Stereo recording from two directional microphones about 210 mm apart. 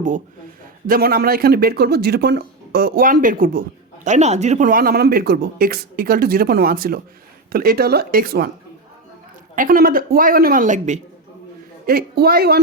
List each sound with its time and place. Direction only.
0.9 s speech: 45° right (ahead or behind)
9.6 s speech: 45° right (ahead or behind)
11.9 s speech: 45° right (ahead or behind)